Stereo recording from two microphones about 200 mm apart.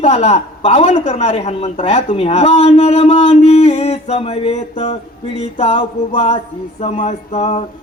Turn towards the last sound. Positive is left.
turn(degrees=35)  # may be behind; listen again after turning